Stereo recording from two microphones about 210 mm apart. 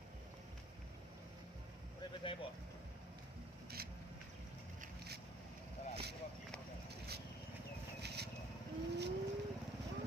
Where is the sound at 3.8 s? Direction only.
45° right (ahead or behind).